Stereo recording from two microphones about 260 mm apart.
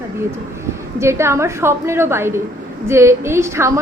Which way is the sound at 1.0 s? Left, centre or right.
Centre.